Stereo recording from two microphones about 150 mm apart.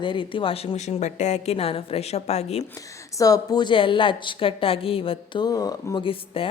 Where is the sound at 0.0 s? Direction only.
30° left (ahead or behind).